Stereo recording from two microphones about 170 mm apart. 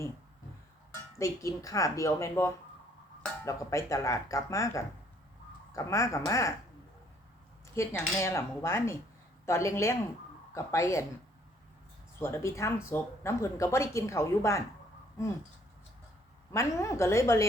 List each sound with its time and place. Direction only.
1.2 s speech: 20° left (ahead or behind)
7.8 s speech: 15° left (ahead or behind)
12.2 s speech: 15° left (ahead or behind)
16.5 s speech: 15° left (ahead or behind)